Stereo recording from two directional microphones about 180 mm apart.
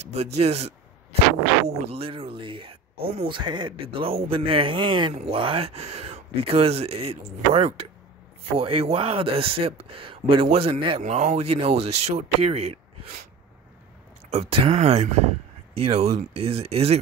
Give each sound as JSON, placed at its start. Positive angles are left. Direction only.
{"t": 0.1, "sound": "speech", "side_deg": -35}
{"t": 14.3, "sound": "speech", "side_deg": -35}